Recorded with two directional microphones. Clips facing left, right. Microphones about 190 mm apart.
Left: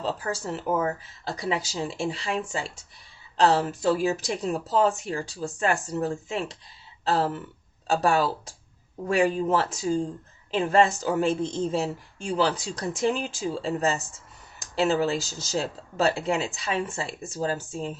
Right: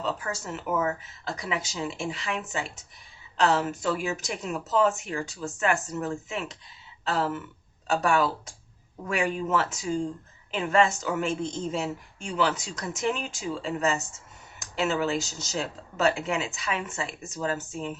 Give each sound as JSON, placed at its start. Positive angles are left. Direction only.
{"t": 0.0, "sound": "a woman's voice", "side_deg": 35}